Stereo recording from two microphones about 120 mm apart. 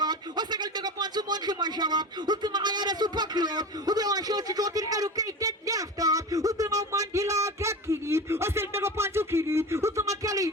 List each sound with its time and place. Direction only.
0.0 s a man's voice: 35° right (ahead or behind)